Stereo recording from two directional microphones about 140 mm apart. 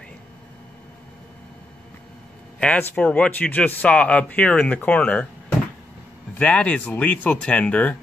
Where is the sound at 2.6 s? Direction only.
10° left (ahead or behind).